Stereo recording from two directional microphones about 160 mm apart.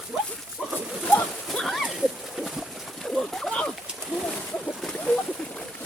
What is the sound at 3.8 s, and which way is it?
Splash, centre (ahead or behind).